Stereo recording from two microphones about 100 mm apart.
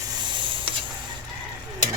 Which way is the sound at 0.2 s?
50° right (ahead or behind).